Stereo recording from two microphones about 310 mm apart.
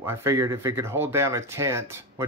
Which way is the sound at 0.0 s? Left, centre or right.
Centre.